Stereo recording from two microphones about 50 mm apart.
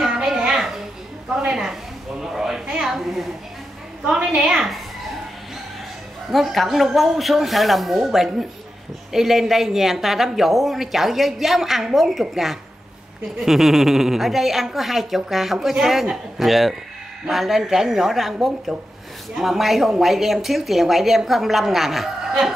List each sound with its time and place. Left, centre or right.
0.0 s a sound: centre
1.3 s a woman's voice: centre
2.6 s a woman's voice: centre
2.9 s speech: centre
4.0 s a woman's voice: centre
6.3 s speech: centre